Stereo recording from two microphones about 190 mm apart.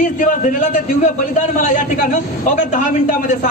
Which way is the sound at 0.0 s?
45° left (ahead or behind).